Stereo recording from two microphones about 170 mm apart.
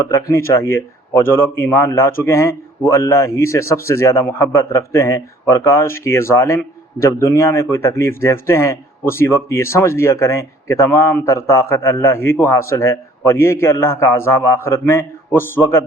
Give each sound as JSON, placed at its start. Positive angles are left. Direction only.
{"t": 0.0, "sound": "a man's voice", "side_deg": 20}